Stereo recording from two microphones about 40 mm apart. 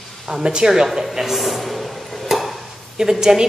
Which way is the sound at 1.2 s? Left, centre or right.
Centre.